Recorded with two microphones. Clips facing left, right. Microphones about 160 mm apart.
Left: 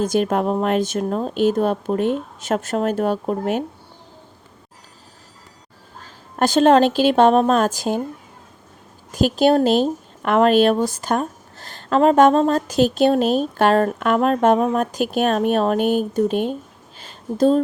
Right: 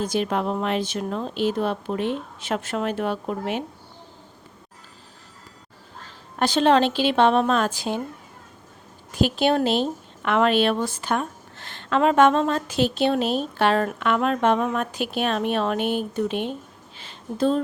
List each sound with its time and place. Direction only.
0.0 s a woman's voice: 45° left (ahead or behind)
6.3 s a woman's voice: 45° left (ahead or behind)
9.1 s speech: 40° left (ahead or behind)
17.0 s a sound: 40° left (ahead or behind)